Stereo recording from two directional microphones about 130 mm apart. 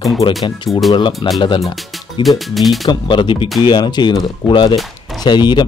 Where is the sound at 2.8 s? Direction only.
35° left (ahead or behind).